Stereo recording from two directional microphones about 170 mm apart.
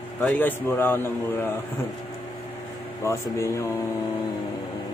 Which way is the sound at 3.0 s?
15° left (ahead or behind).